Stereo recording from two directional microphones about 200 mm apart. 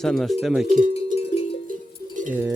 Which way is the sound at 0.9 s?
30° left (ahead or behind).